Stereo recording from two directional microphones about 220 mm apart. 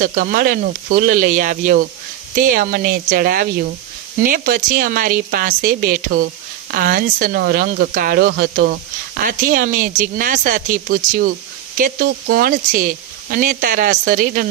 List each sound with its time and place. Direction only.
0.0 s speech: 35° right (ahead or behind)